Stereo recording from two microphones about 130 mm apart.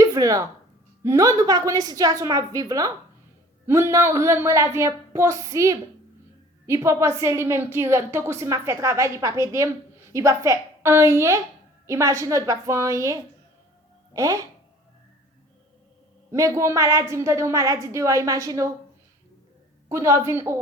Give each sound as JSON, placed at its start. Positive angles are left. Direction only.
{"t": 0.0, "sound": "a sound", "side_deg": -25}
{"t": 1.0, "sound": "a woman's voice", "side_deg": -25}
{"t": 16.3, "sound": "a woman's voice", "side_deg": -20}
{"t": 19.9, "sound": "a woman's voice", "side_deg": -20}